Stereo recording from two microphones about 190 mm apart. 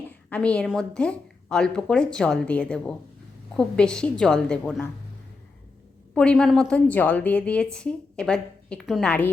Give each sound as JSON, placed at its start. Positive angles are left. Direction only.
{"t": 0.1, "sound": "a woman's voice", "side_deg": 5}
{"t": 6.1, "sound": "a woman's voice", "side_deg": 5}